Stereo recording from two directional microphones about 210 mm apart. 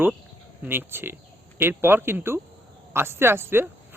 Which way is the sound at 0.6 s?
10° right (ahead or behind).